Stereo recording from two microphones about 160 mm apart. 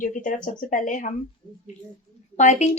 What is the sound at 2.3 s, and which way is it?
Speech, 45° left (ahead or behind).